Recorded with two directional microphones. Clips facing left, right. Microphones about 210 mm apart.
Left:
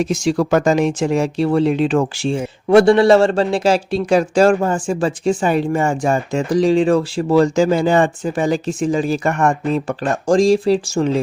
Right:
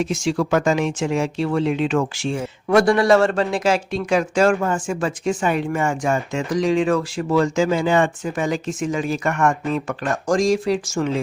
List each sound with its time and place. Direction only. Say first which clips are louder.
0.3 s a man's voice: left 4 dB; 40° left (ahead or behind)